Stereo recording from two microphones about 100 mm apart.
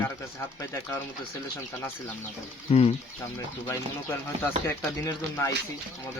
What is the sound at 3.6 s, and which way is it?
Speech, 20° left (ahead or behind).